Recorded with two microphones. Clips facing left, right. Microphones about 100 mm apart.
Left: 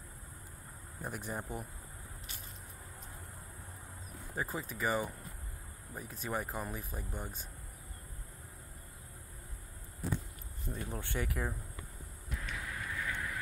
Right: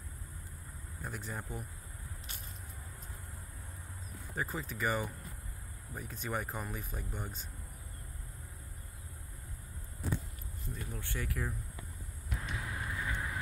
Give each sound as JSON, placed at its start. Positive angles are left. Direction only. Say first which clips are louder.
{"t": 1.0, "sound": "speech", "louder": "left 2 dB", "side_deg": 15}
{"t": 4.4, "sound": "speech", "louder": "even", "side_deg": 10}
{"t": 6.3, "sound": "speech", "louder": "left 1 dB", "side_deg": 5}
{"t": 6.8, "sound": "speech", "louder": "even", "side_deg": 15}
{"t": 10.7, "sound": "speech", "louder": "left 3 dB", "side_deg": 35}
{"t": 11.0, "sound": "speech", "louder": "left 2 dB", "side_deg": 20}
{"t": 12.4, "sound": "a sound", "louder": "right 1 dB", "side_deg": -30}
{"t": 13.1, "sound": "vehicle", "louder": "right 1 dB", "side_deg": -25}